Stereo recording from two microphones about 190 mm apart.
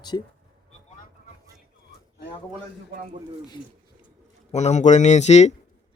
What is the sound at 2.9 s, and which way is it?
Speech, 50° right (ahead or behind).